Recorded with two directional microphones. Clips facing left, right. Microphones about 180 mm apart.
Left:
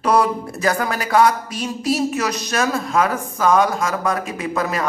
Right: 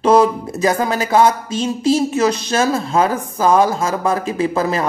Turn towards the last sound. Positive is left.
turn(degrees=-30)  # may be behind; listen again after turning